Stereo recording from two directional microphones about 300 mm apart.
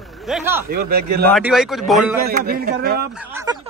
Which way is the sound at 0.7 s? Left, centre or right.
Right.